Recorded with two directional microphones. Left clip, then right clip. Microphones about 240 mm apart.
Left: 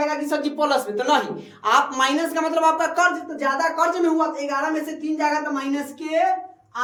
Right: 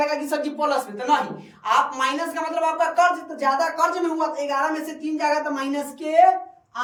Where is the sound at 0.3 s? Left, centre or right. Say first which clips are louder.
Left 2 dB; left.